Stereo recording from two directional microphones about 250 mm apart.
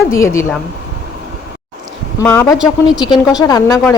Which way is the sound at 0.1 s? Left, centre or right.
Centre.